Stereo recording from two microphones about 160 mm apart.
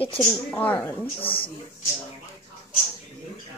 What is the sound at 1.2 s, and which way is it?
Speech, 35° left (ahead or behind).